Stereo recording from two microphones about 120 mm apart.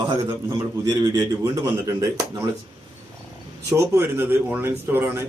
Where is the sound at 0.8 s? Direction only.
30° right (ahead or behind).